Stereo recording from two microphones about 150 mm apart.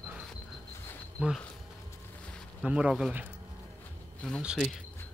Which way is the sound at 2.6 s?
10° right (ahead or behind).